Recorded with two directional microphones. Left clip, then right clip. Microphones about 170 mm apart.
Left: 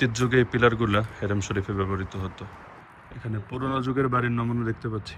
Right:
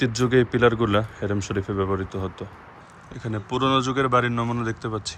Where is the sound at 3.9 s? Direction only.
20° right (ahead or behind).